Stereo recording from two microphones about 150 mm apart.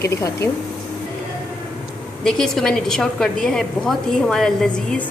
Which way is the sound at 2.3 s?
Centre (ahead or behind).